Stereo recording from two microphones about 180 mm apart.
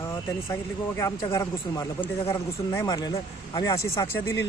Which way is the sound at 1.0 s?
15° left (ahead or behind).